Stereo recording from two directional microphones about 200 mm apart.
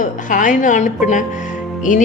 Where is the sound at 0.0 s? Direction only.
40° left (ahead or behind).